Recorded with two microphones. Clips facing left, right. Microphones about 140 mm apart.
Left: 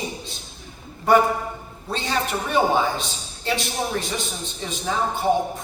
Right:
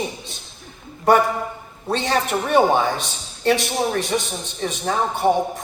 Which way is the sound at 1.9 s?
60° right (ahead or behind).